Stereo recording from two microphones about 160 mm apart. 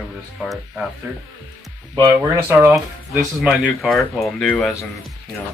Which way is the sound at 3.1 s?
5° right (ahead or behind).